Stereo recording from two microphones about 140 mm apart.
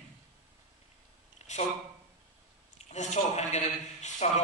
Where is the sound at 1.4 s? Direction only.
50° left (ahead or behind).